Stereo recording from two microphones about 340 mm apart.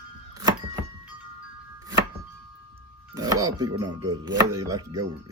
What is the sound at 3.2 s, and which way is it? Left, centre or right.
Chopping, centre.